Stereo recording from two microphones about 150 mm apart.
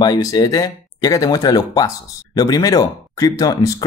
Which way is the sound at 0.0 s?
25° left (ahead or behind).